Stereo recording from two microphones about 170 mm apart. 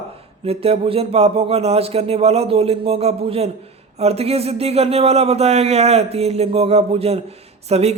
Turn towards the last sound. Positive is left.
turn(degrees=-40)  # may be behind; listen again after turning